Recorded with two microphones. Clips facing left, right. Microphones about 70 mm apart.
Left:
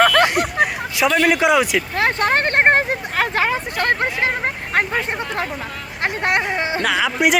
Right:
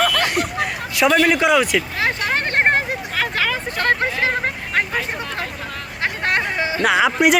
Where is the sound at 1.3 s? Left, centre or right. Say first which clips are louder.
Even; centre.